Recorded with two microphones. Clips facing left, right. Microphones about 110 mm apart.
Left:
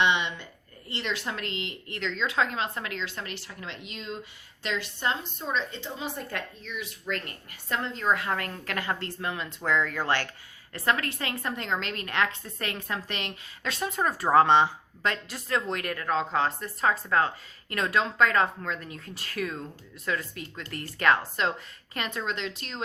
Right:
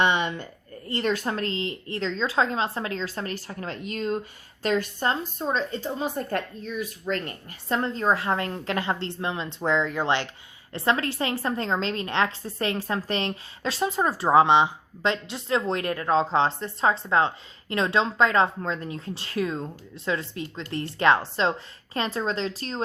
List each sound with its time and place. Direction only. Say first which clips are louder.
0.0 s a sound: right 3 dB; 45° right (ahead or behind)
0.9 s a woman's voice: right 7 dB; 45° right (ahead or behind); by 14.3 s 25° right (ahead or behind)
14.3 s a woman's voice: right 2 dB; 15° right (ahead or behind); by 22.8 s 35° right (ahead or behind)